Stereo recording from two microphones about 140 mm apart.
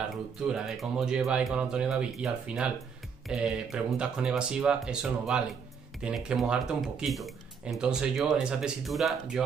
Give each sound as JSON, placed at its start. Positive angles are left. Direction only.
{"t": 0.5, "sound": "speech", "side_deg": -5}